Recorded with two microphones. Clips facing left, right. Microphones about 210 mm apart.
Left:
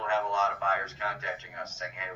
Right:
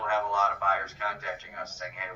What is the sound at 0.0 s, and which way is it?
A man's voice, 25° left (ahead or behind).